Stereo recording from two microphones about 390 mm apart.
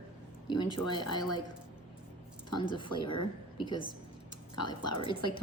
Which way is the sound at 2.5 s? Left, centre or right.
Centre.